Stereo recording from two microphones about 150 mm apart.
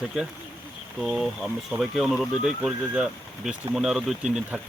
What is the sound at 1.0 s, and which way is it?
Speech, centre (ahead or behind).